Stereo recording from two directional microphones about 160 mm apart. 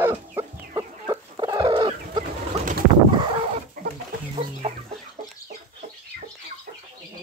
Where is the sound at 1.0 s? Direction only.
25° right (ahead or behind).